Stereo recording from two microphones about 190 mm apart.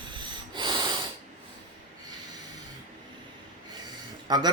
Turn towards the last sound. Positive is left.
turn(degrees=-20)  # may be behind; listen again after turning